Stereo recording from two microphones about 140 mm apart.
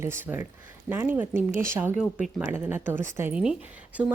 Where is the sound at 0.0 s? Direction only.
20° right (ahead or behind).